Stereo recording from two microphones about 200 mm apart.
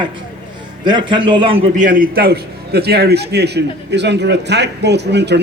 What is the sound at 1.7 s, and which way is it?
A man's voice, 40° right (ahead or behind).